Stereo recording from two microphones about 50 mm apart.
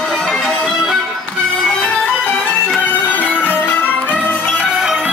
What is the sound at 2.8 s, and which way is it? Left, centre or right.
Music, left.